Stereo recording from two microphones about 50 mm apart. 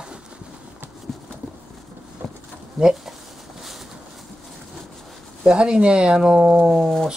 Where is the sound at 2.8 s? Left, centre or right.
Centre.